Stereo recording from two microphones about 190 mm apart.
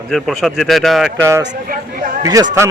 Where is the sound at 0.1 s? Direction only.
Centre (ahead or behind).